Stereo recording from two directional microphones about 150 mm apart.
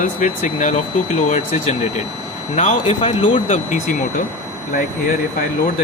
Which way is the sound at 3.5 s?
60° left (ahead or behind).